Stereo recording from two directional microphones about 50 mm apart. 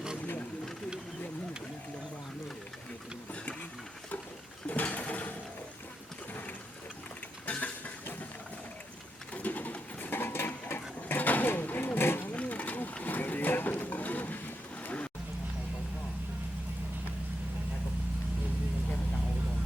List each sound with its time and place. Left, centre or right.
4.6 s sewing machine: left
7.4 s a sound: left
9.3 s bird: left
12.3 s roaring cats: left
13.0 s horse: left